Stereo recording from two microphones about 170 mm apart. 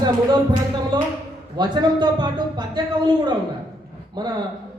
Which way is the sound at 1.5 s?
25° right (ahead or behind).